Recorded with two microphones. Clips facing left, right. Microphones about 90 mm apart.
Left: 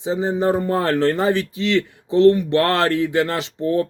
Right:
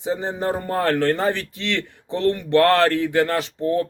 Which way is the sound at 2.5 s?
20° left (ahead or behind).